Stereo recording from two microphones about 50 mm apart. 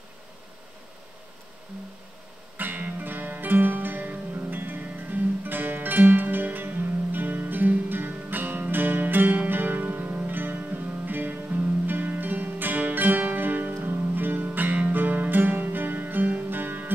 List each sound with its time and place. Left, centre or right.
2.5 s music: right
13.7 s music: right